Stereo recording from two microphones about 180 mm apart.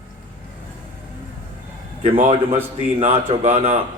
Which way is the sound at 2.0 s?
35° right (ahead or behind).